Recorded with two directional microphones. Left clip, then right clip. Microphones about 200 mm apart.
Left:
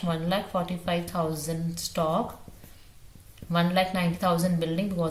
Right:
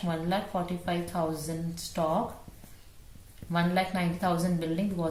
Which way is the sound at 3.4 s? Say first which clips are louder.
Left 4 dB; 25° left (ahead or behind).